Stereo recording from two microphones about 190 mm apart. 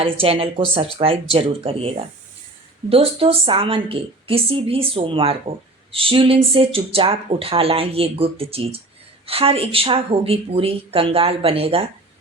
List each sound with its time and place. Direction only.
0.0 s a woman's voice: 30° right (ahead or behind)
2.9 s a woman's voice: 30° right (ahead or behind)